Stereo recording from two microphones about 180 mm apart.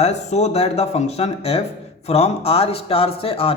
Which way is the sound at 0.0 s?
40° left (ahead or behind).